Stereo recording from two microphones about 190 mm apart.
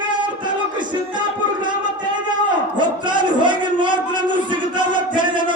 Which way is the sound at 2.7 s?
25° right (ahead or behind).